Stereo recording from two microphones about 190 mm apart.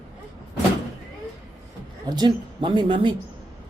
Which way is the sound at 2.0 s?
20° right (ahead or behind).